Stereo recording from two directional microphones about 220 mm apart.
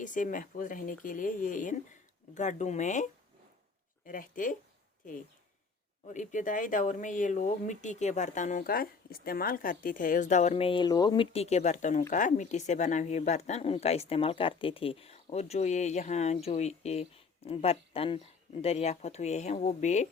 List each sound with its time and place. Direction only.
0.0 s a woman's voice: 35° left (ahead or behind)